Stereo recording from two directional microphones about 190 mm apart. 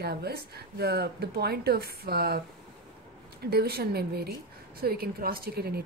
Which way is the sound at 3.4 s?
55° right (ahead or behind).